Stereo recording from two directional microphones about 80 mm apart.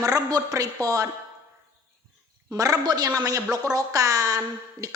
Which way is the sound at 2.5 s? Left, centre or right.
Right.